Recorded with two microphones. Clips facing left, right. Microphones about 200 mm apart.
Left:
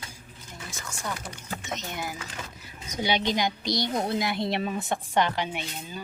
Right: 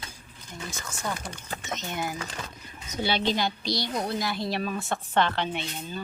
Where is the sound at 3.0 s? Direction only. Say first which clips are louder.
Even; 15° left (ahead or behind).